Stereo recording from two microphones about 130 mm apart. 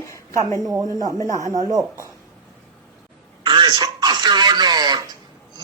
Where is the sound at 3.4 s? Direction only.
35° right (ahead or behind).